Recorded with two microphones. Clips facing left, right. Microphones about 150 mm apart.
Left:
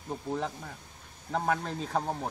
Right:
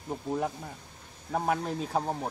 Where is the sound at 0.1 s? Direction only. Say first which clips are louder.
Right 2 dB; 10° right (ahead or behind).